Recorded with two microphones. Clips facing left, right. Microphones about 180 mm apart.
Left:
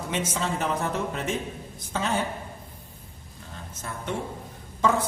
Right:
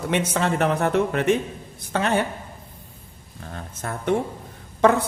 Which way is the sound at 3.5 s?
60° right (ahead or behind).